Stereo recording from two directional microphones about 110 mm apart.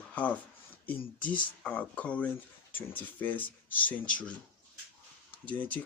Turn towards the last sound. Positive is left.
turn(degrees=15)  # may be behind; listen again after turning